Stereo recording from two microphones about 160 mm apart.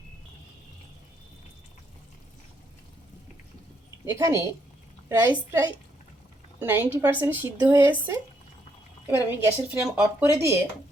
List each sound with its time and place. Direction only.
4.0 s speech: 20° right (ahead or behind)